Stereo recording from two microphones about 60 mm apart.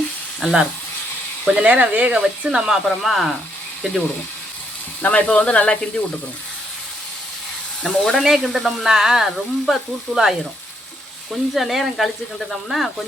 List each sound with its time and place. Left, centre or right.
0.3 s speech: centre
1.5 s speech: right; by 3.3 s centre
5.0 s speech: left
7.8 s speech: centre